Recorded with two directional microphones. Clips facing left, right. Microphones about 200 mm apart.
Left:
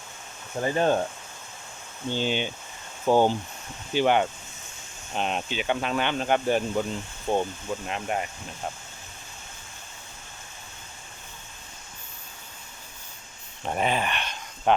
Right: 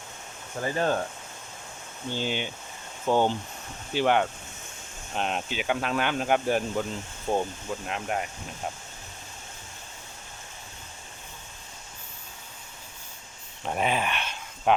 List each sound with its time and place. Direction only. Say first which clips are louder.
0.6 s speech: left 3 dB; 20° left (ahead or behind)
2.1 s speech: left 3 dB; 20° left (ahead or behind)
3.1 s speech: left 3 dB; 10° left (ahead or behind)
13.7 s a sound: left 1 dB; centre (ahead or behind)